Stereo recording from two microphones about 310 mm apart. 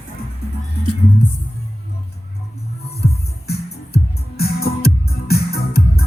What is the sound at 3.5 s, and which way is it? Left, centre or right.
Music, left.